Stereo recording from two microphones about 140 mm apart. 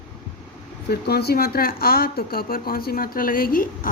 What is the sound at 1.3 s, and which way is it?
A woman's voice, 90° left.